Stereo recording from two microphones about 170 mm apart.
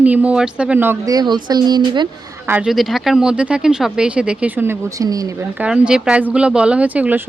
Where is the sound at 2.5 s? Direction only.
5° right (ahead or behind).